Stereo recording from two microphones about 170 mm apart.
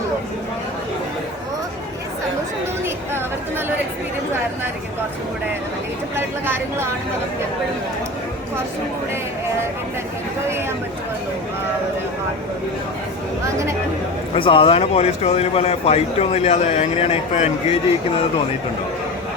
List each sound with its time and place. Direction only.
6.1 s speech: 15° right (ahead or behind)
14.3 s speech: 30° left (ahead or behind)